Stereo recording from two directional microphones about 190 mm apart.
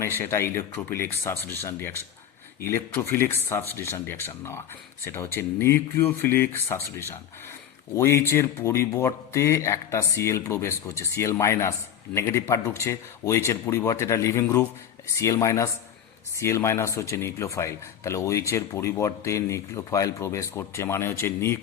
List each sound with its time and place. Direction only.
0.0 s speech: 15° left (ahead or behind)